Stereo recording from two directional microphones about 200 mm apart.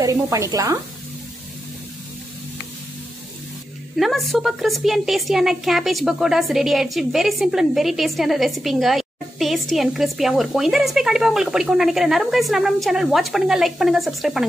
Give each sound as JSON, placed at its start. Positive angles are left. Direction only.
{"t": 0.0, "sound": "speech", "side_deg": -15}
{"t": 4.0, "sound": "a woman's voice", "side_deg": 0}